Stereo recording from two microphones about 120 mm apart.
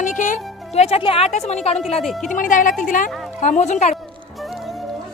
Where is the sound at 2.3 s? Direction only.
90° left; by 3.9 s 70° left (ahead or behind).